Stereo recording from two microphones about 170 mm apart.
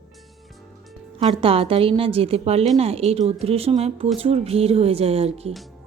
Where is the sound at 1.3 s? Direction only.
35° right (ahead or behind).